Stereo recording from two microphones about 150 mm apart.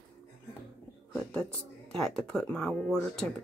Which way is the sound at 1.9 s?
5° left (ahead or behind).